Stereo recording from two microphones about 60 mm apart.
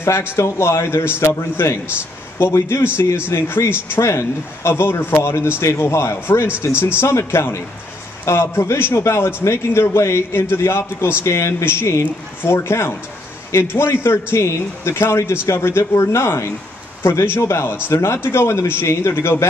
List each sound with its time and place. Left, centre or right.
0.4 s a man's voice: left
3.9 s a man's voice: left